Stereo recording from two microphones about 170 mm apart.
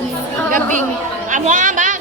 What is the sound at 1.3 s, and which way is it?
Speech, 50° right (ahead or behind).